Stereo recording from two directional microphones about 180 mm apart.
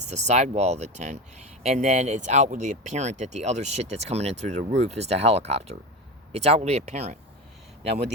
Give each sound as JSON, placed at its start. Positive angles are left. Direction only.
{"t": 0.0, "sound": "speech", "side_deg": -40}